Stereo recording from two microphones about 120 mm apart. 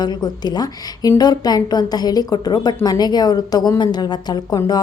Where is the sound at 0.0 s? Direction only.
35° left (ahead or behind).